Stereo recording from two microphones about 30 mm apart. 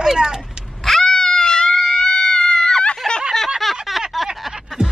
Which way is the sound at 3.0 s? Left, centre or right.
Centre.